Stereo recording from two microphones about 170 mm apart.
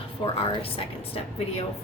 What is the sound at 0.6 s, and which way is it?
A woman's voice, 35° left (ahead or behind).